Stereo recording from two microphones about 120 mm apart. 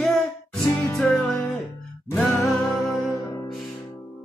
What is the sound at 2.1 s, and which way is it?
Music, 20° left (ahead or behind).